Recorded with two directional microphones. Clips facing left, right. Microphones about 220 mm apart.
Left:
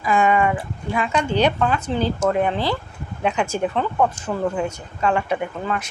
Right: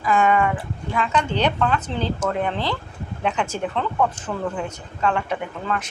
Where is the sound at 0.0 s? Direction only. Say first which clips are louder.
Left 1 dB; 10° left (ahead or behind).